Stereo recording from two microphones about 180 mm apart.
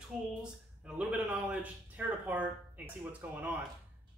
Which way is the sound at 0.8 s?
5° right (ahead or behind).